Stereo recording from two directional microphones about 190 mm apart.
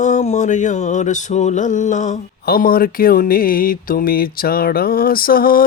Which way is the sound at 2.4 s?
50° left (ahead or behind).